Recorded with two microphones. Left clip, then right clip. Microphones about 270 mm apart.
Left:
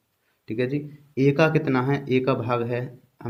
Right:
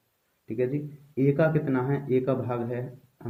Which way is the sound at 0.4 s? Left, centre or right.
Left.